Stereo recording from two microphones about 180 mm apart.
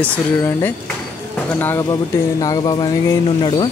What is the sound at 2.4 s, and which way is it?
Speech, 20° left (ahead or behind).